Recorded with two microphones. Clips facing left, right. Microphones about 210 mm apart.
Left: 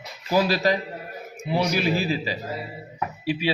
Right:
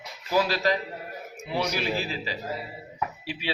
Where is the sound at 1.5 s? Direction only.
10° left (ahead or behind).